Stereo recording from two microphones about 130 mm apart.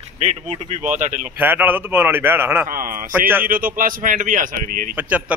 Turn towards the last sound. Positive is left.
turn(degrees=-10)  # may be behind; listen again after turning